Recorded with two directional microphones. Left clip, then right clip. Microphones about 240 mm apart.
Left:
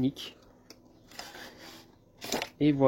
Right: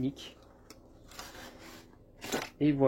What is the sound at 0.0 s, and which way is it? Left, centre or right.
Speech, left.